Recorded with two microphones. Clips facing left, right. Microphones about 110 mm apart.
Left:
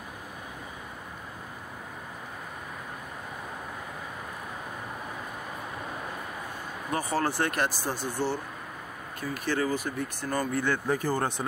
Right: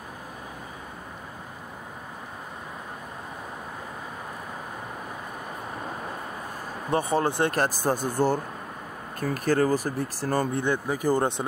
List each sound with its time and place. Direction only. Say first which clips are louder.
6.9 s speech: right 4 dB; 25° right (ahead or behind)
7.5 s speech: right 5 dB; 40° right (ahead or behind); by 11.4 s 20° right (ahead or behind)